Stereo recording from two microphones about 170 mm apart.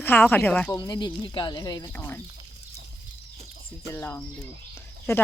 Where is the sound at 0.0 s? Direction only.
10° left (ahead or behind).